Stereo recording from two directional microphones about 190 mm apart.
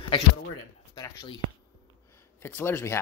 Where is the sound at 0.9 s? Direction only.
20° left (ahead or behind).